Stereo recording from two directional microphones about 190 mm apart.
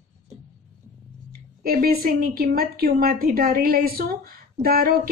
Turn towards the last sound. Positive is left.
turn(degrees=-50)  # may be behind; listen again after turning